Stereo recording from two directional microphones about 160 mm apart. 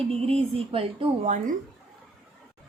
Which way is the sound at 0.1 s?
35° right (ahead or behind).